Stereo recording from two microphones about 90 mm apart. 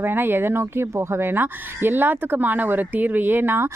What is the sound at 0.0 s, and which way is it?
Speech, 25° right (ahead or behind).